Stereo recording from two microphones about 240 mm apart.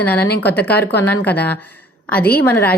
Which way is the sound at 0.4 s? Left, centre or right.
Centre.